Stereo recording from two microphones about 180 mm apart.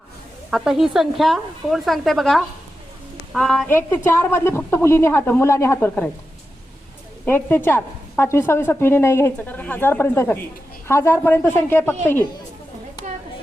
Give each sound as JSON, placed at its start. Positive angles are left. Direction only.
{"t": 0.5, "sound": "a woman's voice", "side_deg": 0}
{"t": 7.3, "sound": "a woman's voice", "side_deg": 10}